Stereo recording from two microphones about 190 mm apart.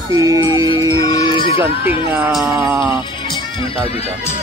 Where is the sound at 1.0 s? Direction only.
20° left (ahead or behind).